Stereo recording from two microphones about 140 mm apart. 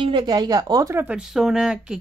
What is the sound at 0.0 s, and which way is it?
Speech, 30° right (ahead or behind).